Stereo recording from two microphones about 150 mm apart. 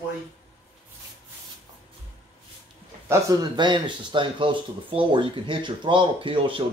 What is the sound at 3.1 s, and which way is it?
Speech, 25° right (ahead or behind).